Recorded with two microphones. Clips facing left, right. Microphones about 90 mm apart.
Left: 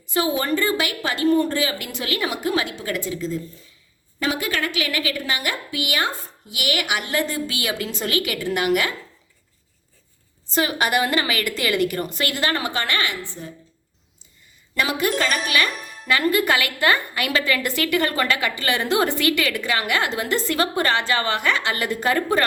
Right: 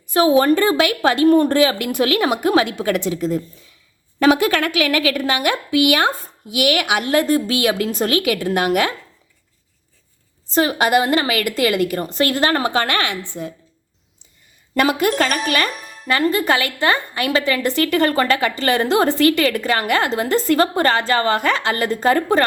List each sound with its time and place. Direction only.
0.1 s a woman's voice: 60° right (ahead or behind)
10.5 s speech: 40° right (ahead or behind)
12.4 s a woman's voice: 50° right (ahead or behind)
13.4 s speech: 75° right (ahead or behind)
14.8 s a woman's voice: 50° right (ahead or behind)